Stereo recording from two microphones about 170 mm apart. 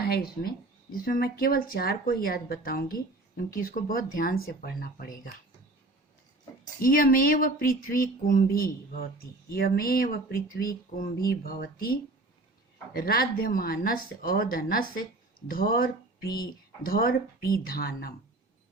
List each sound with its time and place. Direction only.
0.0 s speech: 65° left (ahead or behind)
6.8 s speech: 55° left (ahead or behind)